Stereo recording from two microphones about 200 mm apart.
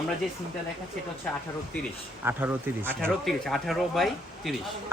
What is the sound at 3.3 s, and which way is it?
Speech, centre (ahead or behind).